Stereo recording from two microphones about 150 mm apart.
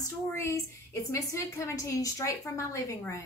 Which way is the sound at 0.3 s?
20° left (ahead or behind).